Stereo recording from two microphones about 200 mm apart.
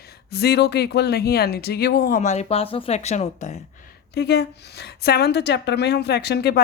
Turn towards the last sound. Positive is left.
turn(degrees=55)  # may be behind; listen again after turning